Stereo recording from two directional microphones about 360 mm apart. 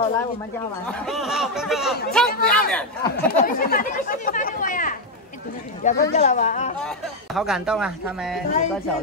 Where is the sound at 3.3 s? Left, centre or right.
Left.